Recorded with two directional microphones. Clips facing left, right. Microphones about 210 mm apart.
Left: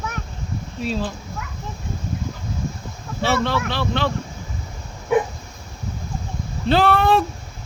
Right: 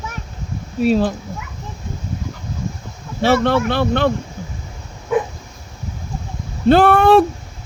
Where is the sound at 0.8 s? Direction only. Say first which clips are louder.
Right 10 dB; 60° right (ahead or behind).